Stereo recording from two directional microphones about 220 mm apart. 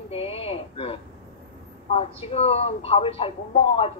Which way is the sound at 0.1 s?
25° left (ahead or behind).